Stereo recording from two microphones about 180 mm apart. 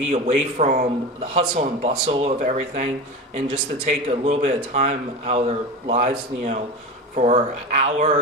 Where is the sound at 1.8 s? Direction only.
35° right (ahead or behind).